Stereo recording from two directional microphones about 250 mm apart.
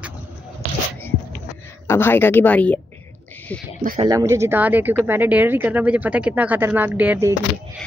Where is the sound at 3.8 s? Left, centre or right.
Right.